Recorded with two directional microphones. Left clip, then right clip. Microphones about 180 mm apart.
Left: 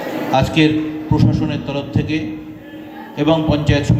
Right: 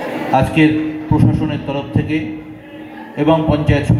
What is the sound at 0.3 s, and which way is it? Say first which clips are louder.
A man's voice: right 2 dB; 30° right (ahead or behind).